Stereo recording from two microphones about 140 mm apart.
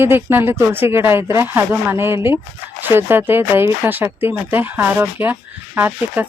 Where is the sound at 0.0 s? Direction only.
15° right (ahead or behind).